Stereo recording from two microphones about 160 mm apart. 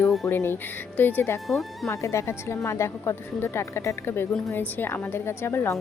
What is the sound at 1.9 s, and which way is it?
A woman's voice, 20° left (ahead or behind).